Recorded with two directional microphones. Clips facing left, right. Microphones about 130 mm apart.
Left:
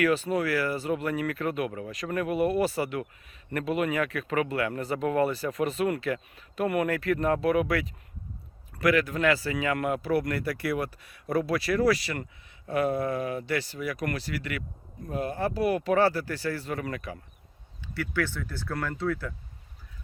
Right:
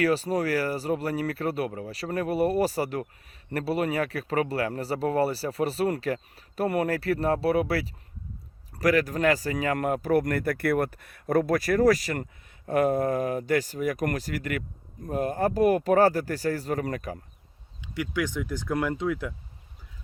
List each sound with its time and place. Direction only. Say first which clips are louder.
0.0 s speech: right 1 dB; 35° right (ahead or behind)
17.7 s speech: right 1 dB; 15° right (ahead or behind)